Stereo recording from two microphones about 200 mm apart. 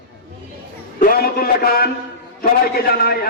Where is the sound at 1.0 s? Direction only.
45° left (ahead or behind).